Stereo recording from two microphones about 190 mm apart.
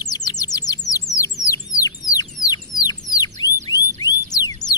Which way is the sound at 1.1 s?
15° left (ahead or behind).